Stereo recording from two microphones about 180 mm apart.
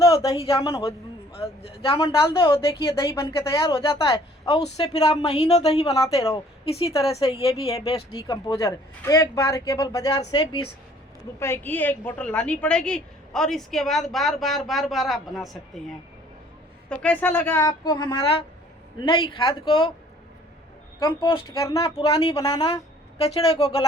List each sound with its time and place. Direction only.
0.0 s a sound: 15° left (ahead or behind)
1.4 s speech: 30° left (ahead or behind)
3.2 s a man's voice: 15° left (ahead or behind)
3.6 s a man's voice: 30° left (ahead or behind)
5.8 s a man's voice: 20° left (ahead or behind)
6.7 s speech: 35° left (ahead or behind)
7.1 s a man's voice: 20° left (ahead or behind)
11.3 s a woman's voice: 15° left (ahead or behind)
16.9 s a man's voice: 5° left (ahead or behind)
17.6 s a man's voice: 20° left (ahead or behind)
21.0 s a man's voice: 25° left (ahead or behind)
21.8 s speech: 30° left (ahead or behind)